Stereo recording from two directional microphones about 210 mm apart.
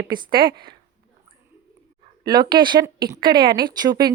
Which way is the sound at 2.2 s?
20° right (ahead or behind).